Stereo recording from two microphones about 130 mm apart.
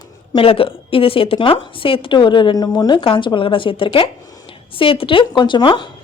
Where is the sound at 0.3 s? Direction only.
45° left (ahead or behind).